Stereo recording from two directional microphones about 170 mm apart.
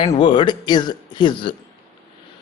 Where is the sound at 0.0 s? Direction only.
35° left (ahead or behind).